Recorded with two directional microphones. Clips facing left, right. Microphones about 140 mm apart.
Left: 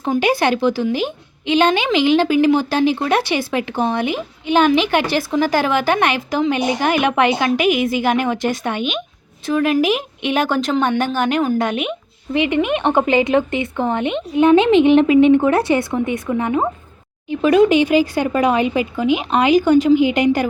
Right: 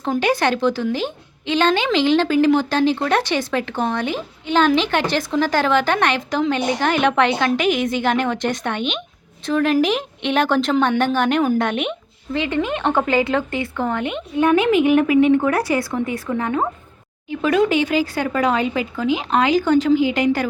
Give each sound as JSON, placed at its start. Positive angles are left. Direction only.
{"t": 0.2, "sound": "a woman's voice", "side_deg": 10}
{"t": 12.3, "sound": "a woman's voice", "side_deg": 15}